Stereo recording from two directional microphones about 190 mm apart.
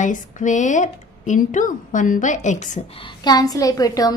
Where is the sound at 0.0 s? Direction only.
40° left (ahead or behind).